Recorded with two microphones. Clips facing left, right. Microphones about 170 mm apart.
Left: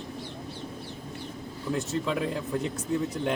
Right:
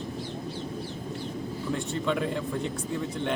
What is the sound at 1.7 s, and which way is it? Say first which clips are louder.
Speech: even; 5° left (ahead or behind).